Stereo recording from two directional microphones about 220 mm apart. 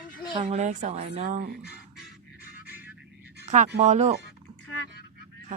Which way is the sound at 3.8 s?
30° right (ahead or behind).